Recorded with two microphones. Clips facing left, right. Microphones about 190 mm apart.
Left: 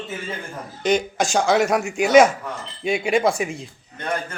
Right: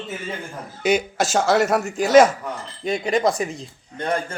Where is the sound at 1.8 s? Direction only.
10° left (ahead or behind).